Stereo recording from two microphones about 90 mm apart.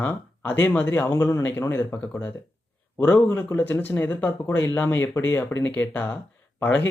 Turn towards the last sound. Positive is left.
turn(degrees=20)  # may be behind; listen again after turning